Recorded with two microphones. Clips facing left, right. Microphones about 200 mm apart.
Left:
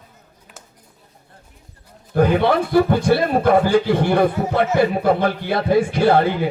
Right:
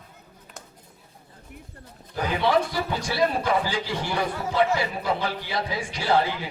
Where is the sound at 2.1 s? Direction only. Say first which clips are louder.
Left 7 dB; 55° left (ahead or behind).